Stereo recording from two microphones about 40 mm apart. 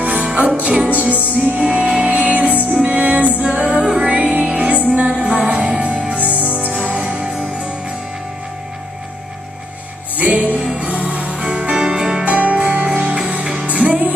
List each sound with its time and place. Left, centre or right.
0.0 s music: right
1.6 s music: right
2.0 s music: right
3.8 s music: centre
4.1 s music: right
6.4 s music: right
6.8 s music: right
7.2 s music: centre
10.1 s music: right; by 12.3 s centre
12.3 s music: right
13.0 s music: right